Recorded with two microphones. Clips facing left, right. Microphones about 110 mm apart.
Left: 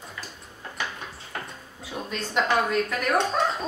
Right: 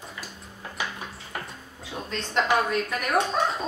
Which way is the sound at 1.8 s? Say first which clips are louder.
Left 1 dB; 10° left (ahead or behind).